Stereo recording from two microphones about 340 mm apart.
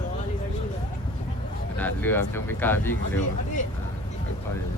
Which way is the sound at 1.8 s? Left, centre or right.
Centre.